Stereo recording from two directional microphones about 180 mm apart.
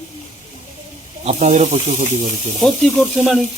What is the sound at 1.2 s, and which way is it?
Speech, 40° right (ahead or behind).